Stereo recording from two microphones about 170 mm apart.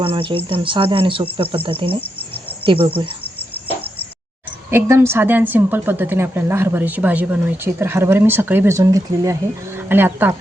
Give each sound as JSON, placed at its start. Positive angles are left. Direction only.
{"t": 0.0, "sound": "speech", "side_deg": -30}
{"t": 4.7, "sound": "a woman's voice", "side_deg": -15}